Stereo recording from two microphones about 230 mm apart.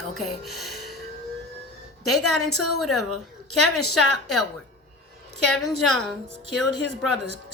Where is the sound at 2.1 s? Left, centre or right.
Left.